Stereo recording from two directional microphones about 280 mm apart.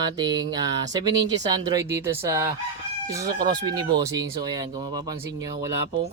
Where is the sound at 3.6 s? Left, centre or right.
Centre.